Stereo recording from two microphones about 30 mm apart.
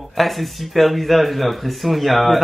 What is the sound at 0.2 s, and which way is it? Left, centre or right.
Speech, centre.